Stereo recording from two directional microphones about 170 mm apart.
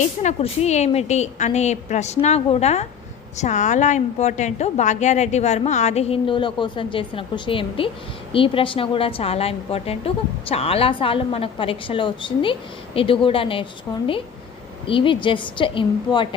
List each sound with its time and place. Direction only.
0.2 s a woman's voice: 40° left (ahead or behind)
14.8 s a woman's voice: 30° left (ahead or behind)